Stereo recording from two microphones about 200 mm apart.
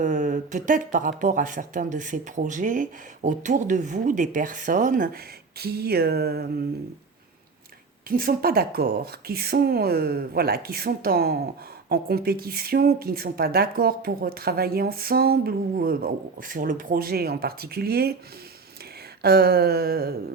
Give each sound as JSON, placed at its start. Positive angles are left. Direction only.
{"t": 0.0, "sound": "speech", "side_deg": -40}
{"t": 5.5, "sound": "speech", "side_deg": -50}
{"t": 8.1, "sound": "speech", "side_deg": -45}
{"t": 19.2, "sound": "speech", "side_deg": -50}